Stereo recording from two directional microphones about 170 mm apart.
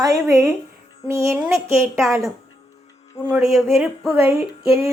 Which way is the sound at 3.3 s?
Centre (ahead or behind).